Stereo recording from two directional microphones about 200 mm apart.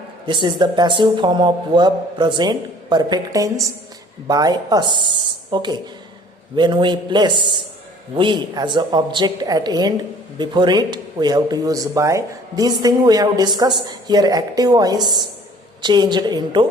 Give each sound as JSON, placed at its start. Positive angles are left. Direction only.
{"t": 0.3, "sound": "speech", "side_deg": -25}